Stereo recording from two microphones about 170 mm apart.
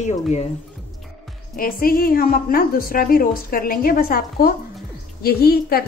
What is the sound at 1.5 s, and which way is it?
A woman's voice, 55° left (ahead or behind).